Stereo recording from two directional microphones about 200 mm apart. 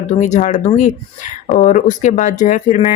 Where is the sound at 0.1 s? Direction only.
35° left (ahead or behind).